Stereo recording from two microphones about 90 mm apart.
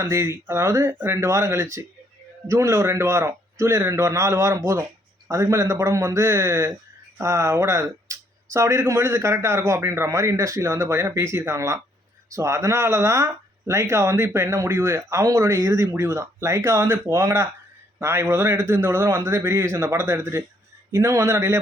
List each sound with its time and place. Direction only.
0.0 s a man's voice: 35° right (ahead or behind)